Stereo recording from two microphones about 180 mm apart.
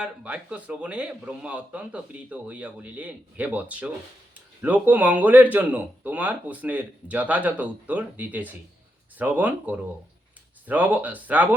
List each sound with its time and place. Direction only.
0.0 s a man's voice: 5° right (ahead or behind)